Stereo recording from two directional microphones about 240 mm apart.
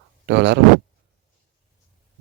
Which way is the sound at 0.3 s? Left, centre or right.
Right.